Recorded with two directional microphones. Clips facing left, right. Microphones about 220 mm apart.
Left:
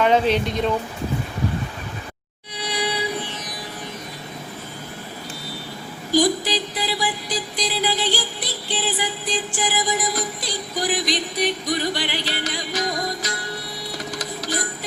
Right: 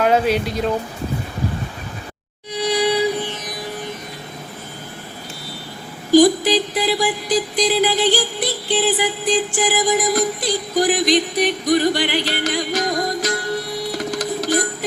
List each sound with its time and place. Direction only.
0.0 s speech: 5° right (ahead or behind)
2.6 s music: 45° right (ahead or behind)
6.1 s music: 50° right (ahead or behind)